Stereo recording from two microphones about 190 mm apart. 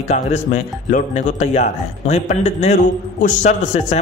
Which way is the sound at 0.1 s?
40° left (ahead or behind).